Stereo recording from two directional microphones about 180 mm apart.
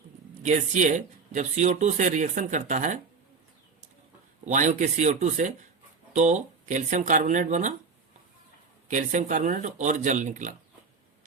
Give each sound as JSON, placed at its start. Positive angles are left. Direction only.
{"t": 0.4, "sound": "speech", "side_deg": -40}
{"t": 4.4, "sound": "speech", "side_deg": -45}
{"t": 8.9, "sound": "speech", "side_deg": -45}